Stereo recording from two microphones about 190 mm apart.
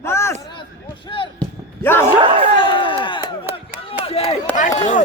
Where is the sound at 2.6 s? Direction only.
25° left (ahead or behind).